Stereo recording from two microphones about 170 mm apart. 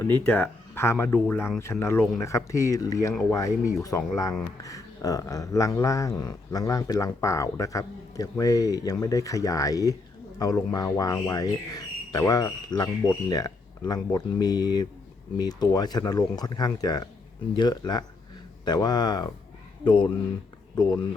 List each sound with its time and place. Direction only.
0.0 s speech: 10° left (ahead or behind)